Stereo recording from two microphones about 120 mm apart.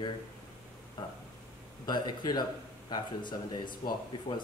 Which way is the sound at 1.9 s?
35° left (ahead or behind).